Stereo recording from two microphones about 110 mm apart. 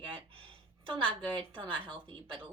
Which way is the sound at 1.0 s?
10° left (ahead or behind).